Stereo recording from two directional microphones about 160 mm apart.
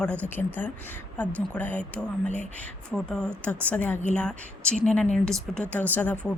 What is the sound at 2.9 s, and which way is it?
A woman's voice, 5° left (ahead or behind).